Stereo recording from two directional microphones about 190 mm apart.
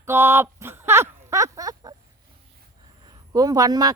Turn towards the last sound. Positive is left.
turn(degrees=-20)  # may be behind; listen again after turning